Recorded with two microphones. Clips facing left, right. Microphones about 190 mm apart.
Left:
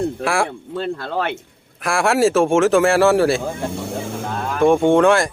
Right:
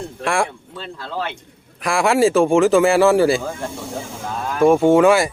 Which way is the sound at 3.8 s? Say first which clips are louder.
Left 4 dB; 60° left (ahead or behind).